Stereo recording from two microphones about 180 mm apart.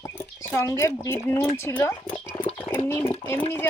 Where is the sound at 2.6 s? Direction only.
10° left (ahead or behind).